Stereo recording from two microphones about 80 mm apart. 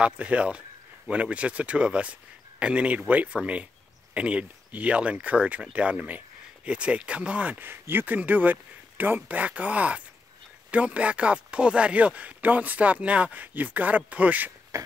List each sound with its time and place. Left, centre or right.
0.0 s speech: centre